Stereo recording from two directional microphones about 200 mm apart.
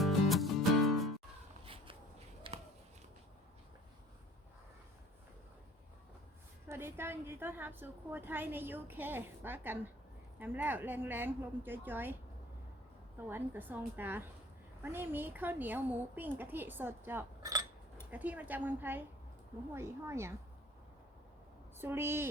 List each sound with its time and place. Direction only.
0.0 s music: centre (ahead or behind)
1.6 s a sound: 25° right (ahead or behind)
6.7 s a woman's voice: 10° right (ahead or behind)
13.1 s a woman's voice: 10° right (ahead or behind)
21.8 s a woman's voice: 10° right (ahead or behind)